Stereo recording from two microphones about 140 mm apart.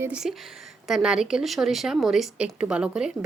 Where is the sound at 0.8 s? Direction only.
Centre (ahead or behind).